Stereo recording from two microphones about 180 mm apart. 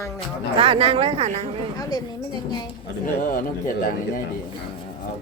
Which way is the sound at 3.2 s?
50° left (ahead or behind).